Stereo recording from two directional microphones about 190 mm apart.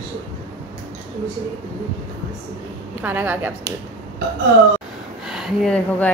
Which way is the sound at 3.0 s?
10° right (ahead or behind).